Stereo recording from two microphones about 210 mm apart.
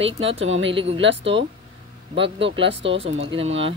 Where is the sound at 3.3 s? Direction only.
30° right (ahead or behind).